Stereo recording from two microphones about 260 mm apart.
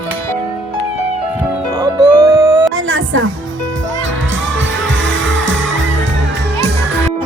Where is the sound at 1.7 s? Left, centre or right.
Centre.